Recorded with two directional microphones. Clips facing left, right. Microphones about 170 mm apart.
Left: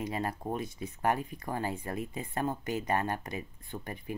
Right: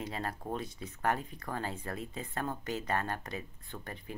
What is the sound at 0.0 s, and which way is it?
Speech, 15° left (ahead or behind).